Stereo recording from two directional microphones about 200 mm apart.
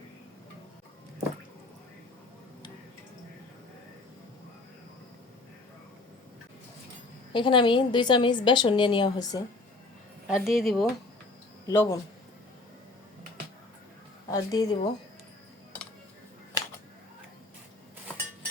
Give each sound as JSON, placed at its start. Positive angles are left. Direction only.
{"t": 7.3, "sound": "a woman's voice", "side_deg": 25}
{"t": 10.2, "sound": "speech", "side_deg": -5}
{"t": 11.6, "sound": "speech", "side_deg": 15}
{"t": 14.3, "sound": "a woman's voice", "side_deg": 15}